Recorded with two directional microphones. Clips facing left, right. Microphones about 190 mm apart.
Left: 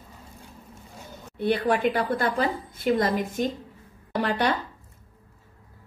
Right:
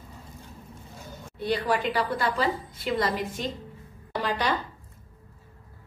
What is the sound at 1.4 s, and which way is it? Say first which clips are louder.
A woman's voice: left 4 dB; 55° left (ahead or behind).